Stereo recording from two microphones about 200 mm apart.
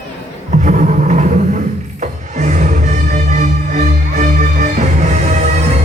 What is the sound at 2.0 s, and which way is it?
Music, 40° right (ahead or behind).